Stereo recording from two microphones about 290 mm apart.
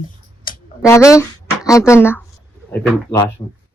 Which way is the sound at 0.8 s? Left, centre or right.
Centre.